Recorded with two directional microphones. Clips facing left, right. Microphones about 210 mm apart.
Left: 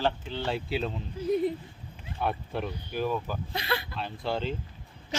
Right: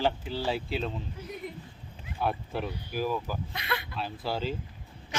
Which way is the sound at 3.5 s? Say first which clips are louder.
Left 6 dB; 30° left (ahead or behind).